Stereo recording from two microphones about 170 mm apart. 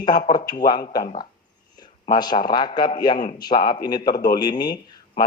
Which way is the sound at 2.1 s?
25° left (ahead or behind).